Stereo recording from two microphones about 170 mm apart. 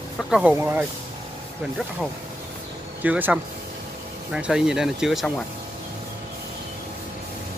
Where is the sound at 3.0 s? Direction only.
10° right (ahead or behind).